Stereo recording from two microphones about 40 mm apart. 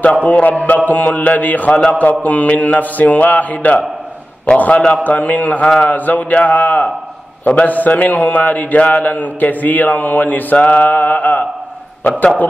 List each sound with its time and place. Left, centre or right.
0.0 s a man's voice: left